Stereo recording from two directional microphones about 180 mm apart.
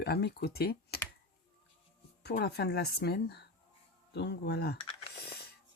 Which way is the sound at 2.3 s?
65° left (ahead or behind).